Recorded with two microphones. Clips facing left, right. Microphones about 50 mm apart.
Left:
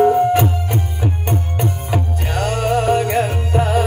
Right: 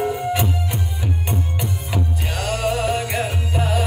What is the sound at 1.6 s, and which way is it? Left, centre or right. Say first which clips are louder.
Music: left 4 dB; left.